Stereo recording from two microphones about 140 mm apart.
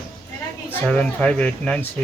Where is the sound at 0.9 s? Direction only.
5° left (ahead or behind).